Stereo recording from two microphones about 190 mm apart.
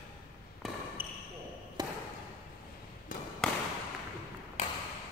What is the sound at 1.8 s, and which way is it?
Basketball bounce, 20° right (ahead or behind).